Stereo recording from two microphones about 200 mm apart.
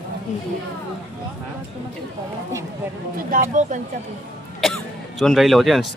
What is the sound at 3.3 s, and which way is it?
Speech, 40° right (ahead or behind).